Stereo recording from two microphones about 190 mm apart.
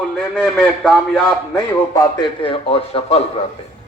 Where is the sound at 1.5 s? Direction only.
20° left (ahead or behind).